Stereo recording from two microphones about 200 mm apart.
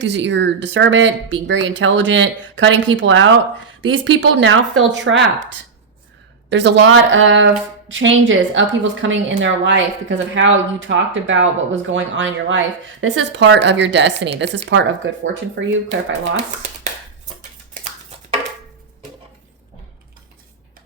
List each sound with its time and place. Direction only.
0.0 s a woman's voice: 60° right (ahead or behind)